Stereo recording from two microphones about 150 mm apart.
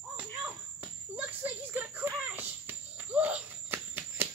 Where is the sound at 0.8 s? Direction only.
15° right (ahead or behind).